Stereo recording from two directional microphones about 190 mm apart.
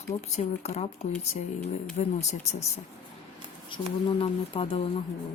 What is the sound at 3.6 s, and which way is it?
Speech, 30° left (ahead or behind).